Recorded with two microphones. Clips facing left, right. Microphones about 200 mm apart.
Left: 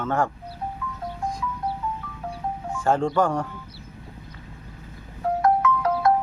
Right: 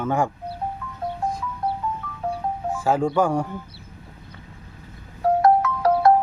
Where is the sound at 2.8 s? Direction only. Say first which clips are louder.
Right 1 dB; 5° right (ahead or behind).